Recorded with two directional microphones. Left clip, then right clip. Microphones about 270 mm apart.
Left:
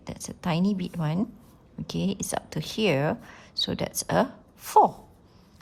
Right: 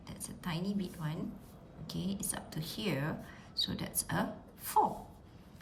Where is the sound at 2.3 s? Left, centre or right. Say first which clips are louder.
Left 11 dB; centre.